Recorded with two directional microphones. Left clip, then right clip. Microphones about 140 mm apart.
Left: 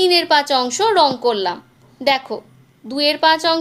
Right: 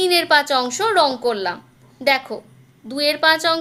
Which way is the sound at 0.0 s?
20° left (ahead or behind).